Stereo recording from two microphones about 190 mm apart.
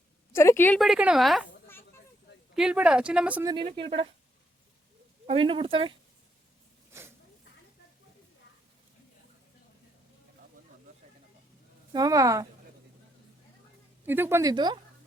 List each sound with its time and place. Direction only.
0.3 s a woman's voice: 10° left (ahead or behind)
0.8 s speech: 5° right (ahead or behind)
2.6 s speech: 5° right (ahead or behind)
3.4 s speech: 25° right (ahead or behind)
5.2 s speech: 30° right (ahead or behind)
11.9 s speech: 20° right (ahead or behind)
14.0 s speech: 10° right (ahead or behind)
14.5 s speech: 25° right (ahead or behind)